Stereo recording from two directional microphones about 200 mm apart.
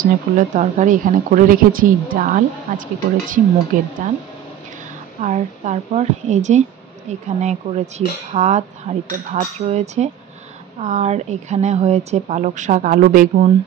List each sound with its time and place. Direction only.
0.0 s speech: 40° right (ahead or behind)
5.2 s speech: 35° right (ahead or behind)